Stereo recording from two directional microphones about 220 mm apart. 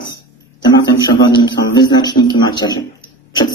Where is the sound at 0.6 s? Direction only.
20° left (ahead or behind).